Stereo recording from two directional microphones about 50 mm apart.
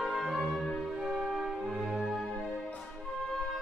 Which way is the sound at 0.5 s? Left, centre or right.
Centre.